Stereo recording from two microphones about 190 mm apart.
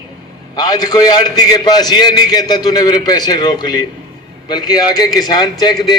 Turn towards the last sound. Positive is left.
turn(degrees=20)  # may be behind; listen again after turning